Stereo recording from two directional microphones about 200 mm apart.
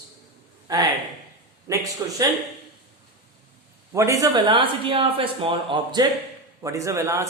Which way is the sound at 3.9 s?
15° right (ahead or behind).